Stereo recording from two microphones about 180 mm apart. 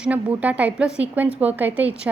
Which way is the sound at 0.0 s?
10° right (ahead or behind).